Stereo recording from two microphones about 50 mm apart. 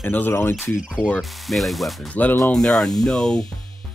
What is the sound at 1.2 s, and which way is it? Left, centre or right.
Speech, centre.